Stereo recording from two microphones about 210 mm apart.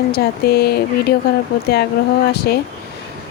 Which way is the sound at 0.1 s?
50° left (ahead or behind).